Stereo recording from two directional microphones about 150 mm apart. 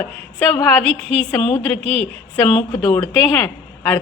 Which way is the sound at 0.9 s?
40° right (ahead or behind).